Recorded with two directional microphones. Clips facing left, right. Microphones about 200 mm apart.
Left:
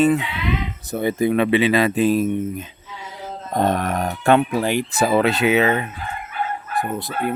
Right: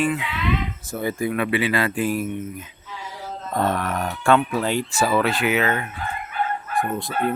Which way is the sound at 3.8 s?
45° left (ahead or behind).